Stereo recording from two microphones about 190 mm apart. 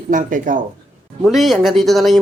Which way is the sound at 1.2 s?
Centre (ahead or behind).